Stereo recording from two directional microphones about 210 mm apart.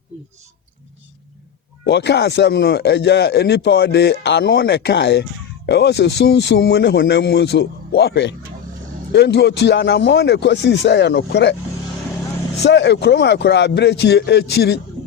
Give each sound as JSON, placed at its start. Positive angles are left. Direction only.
{"t": 1.8, "sound": "speech", "side_deg": 55}
{"t": 12.6, "sound": "speech", "side_deg": 55}